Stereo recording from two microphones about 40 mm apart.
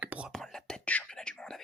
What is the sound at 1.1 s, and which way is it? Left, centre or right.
Whispering, centre.